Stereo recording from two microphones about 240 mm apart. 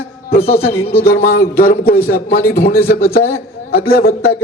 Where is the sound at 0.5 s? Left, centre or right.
Centre.